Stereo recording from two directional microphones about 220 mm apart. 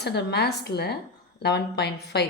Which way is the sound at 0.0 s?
50° left (ahead or behind).